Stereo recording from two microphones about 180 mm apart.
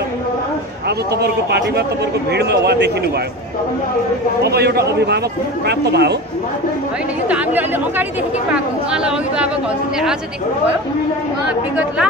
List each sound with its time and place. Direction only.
0.8 s a man's voice: 65° right (ahead or behind)
4.4 s a man's voice: 65° right (ahead or behind)
7.2 s a woman's voice: 5° right (ahead or behind)
11.4 s a woman's voice: 5° right (ahead or behind)